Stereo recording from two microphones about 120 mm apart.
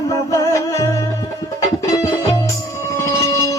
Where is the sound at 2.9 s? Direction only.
25° left (ahead or behind).